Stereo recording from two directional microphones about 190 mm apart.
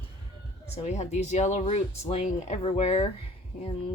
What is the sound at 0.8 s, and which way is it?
Speech, 35° left (ahead or behind).